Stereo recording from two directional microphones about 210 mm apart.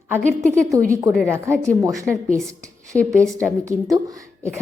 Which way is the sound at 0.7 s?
15° right (ahead or behind).